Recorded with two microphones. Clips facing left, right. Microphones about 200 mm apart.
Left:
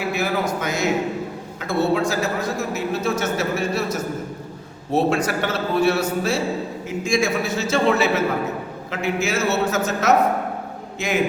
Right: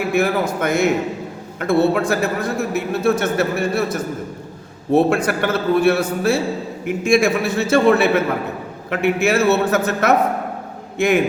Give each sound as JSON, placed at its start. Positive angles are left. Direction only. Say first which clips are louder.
{"t": 0.1, "sound": "a man's voice", "louder": "right 5 dB", "side_deg": -55}
{"t": 4.9, "sound": "a man's voice", "louder": "right 4 dB", "side_deg": -55}